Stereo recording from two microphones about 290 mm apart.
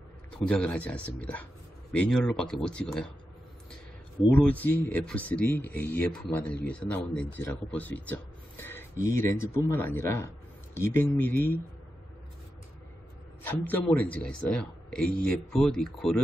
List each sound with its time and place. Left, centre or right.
0.3 s a man's voice: centre
4.2 s a man's voice: centre
8.9 s speech: right
9.7 s speech: centre
13.4 s a man's voice: centre